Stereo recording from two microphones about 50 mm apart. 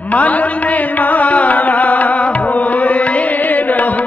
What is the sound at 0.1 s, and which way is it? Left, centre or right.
Music, left.